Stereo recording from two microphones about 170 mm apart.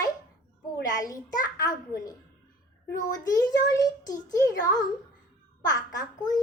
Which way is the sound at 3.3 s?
20° left (ahead or behind).